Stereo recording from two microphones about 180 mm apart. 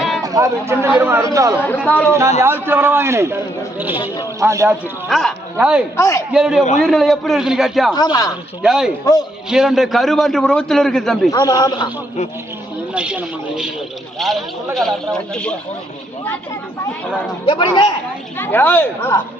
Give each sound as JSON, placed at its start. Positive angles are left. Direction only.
{"t": 0.2, "sound": "a sound", "side_deg": -20}
{"t": 0.7, "sound": "a man's voice", "side_deg": -10}
{"t": 1.9, "sound": "speech", "side_deg": 10}
{"t": 2.4, "sound": "a man's voice", "side_deg": -10}
{"t": 5.0, "sound": "speech", "side_deg": 0}
{"t": 6.0, "sound": "speech", "side_deg": 15}
{"t": 6.3, "sound": "a man's voice", "side_deg": -5}
{"t": 7.9, "sound": "a man's voice", "side_deg": 20}
{"t": 8.6, "sound": "a man's voice", "side_deg": 0}
{"t": 11.3, "sound": "a man's voice", "side_deg": 20}
{"t": 12.9, "sound": "a man's voice", "side_deg": -5}
{"t": 17.4, "sound": "a man's voice", "side_deg": 25}
{"t": 18.3, "sound": "speech", "side_deg": 10}